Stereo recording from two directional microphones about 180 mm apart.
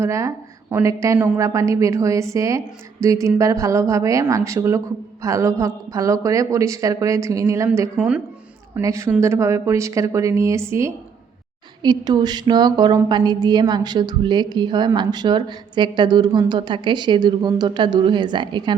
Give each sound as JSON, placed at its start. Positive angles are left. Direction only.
{"t": 0.0, "sound": "a woman's voice", "side_deg": -15}
{"t": 7.7, "sound": "a woman's voice", "side_deg": -5}
{"t": 8.7, "sound": "a woman's voice", "side_deg": -15}